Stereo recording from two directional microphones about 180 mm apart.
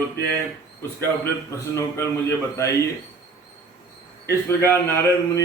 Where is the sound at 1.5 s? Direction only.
15° left (ahead or behind).